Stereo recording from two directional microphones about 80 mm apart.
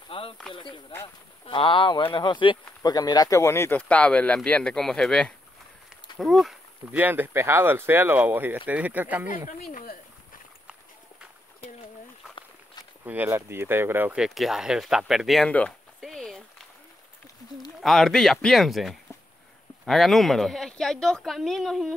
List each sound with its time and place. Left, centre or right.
0.5 s speech: left
2.9 s speech: left
3.3 s speech: left
3.7 s speech: centre
6.9 s speech: right
13.0 s speech: right
14.1 s speech: centre
15.4 s speech: centre
16.0 s a sound: centre
17.8 s speech: centre